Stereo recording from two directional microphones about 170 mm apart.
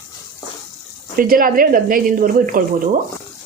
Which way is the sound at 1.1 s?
55° right (ahead or behind).